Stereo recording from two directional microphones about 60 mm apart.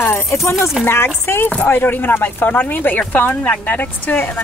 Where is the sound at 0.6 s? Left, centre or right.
Centre.